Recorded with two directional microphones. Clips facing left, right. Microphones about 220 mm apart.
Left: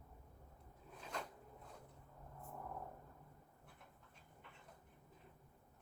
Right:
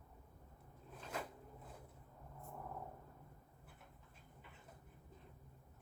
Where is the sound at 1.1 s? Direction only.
5° right (ahead or behind).